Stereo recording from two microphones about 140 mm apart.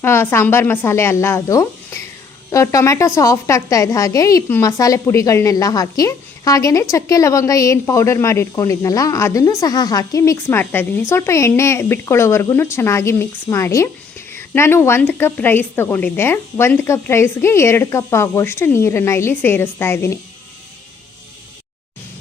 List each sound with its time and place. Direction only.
0.0 s a woman's voice: 15° left (ahead or behind)